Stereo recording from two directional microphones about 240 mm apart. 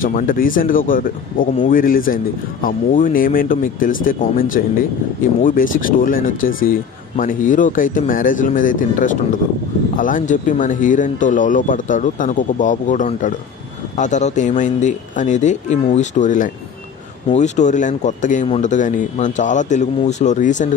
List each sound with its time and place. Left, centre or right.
0.0 s speech: left